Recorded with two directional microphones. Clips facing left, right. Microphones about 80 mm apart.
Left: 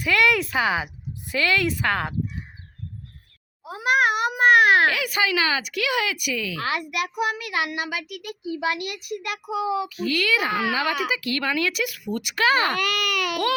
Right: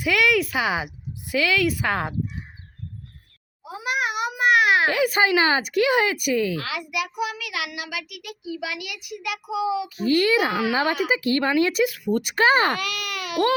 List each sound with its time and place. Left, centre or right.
0.1 s speech: centre
3.7 s a sound: left
4.9 s speech: right
6.6 s a child's voice: left
9.9 s speech: right
12.8 s speech: left